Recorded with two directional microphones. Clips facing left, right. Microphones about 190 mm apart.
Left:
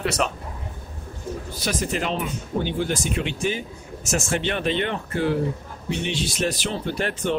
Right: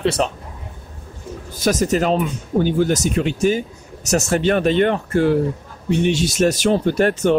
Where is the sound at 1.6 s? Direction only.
45° right (ahead or behind).